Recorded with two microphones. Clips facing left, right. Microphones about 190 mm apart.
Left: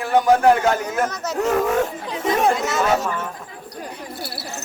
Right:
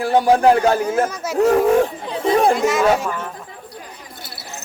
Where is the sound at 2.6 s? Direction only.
10° right (ahead or behind).